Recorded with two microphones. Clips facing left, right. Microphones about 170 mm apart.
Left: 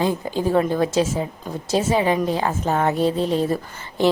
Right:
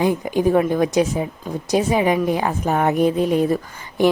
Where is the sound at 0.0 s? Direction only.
15° right (ahead or behind).